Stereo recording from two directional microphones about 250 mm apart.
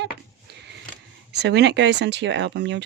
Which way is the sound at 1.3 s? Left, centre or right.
Right.